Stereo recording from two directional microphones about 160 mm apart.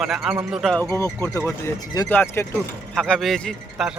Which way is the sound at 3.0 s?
5° left (ahead or behind).